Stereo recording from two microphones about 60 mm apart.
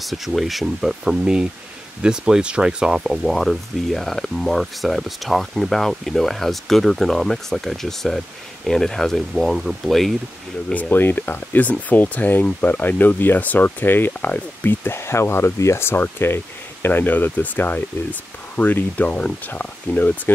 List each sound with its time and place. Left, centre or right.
0.0 s speech: centre
1.1 s speech: centre
3.3 s speech: centre
10.7 s speech: left